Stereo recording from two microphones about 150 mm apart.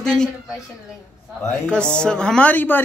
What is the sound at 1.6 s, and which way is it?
Speech, 5° left (ahead or behind).